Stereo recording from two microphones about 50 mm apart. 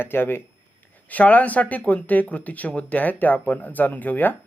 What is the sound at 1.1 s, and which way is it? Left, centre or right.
Speech, left.